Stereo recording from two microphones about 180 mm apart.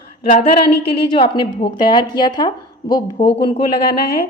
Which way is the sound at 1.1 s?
30° left (ahead or behind).